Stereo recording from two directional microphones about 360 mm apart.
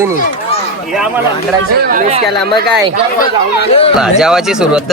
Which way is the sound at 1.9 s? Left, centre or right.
Centre.